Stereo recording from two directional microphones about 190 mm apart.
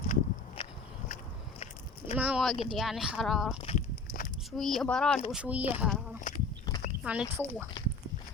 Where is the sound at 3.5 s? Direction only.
30° left (ahead or behind).